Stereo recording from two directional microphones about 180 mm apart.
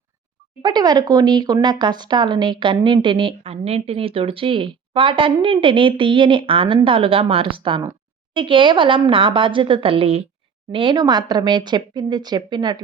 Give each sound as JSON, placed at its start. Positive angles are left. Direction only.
{"t": 0.6, "sound": "speech", "side_deg": -25}